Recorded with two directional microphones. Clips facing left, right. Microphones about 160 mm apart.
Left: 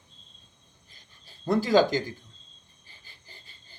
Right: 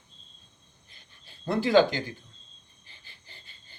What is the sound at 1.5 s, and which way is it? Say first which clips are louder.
Speech: even; 40° left (ahead or behind).